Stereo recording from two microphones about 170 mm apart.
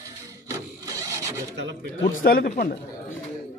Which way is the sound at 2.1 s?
55° left (ahead or behind).